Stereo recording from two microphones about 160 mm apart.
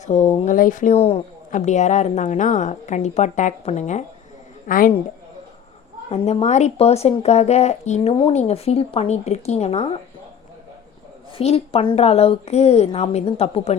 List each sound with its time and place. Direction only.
0.0 s speech: 45° left (ahead or behind)
4.6 s a woman's voice: 60° left (ahead or behind)
6.1 s a woman's voice: 40° left (ahead or behind)
11.3 s a woman's voice: 40° left (ahead or behind)